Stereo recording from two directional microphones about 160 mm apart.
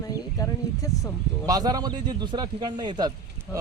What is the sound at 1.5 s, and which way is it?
Speech, 25° right (ahead or behind).